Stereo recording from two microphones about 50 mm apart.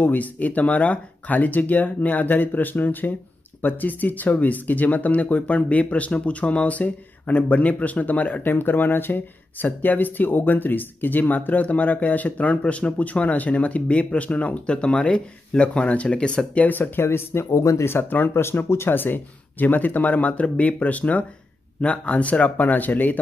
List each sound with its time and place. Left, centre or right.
0.0 s speech: left
8.5 s speech: left
16.5 s speech: left
17.0 s speech: left
17.8 s speech: left
18.9 s speech: left